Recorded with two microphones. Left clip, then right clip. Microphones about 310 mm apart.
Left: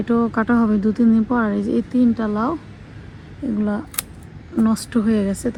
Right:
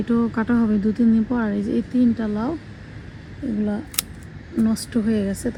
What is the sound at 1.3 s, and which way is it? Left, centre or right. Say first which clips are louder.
Speech: left 4 dB; left.